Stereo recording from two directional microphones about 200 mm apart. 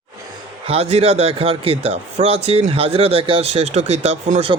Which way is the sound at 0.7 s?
30° right (ahead or behind).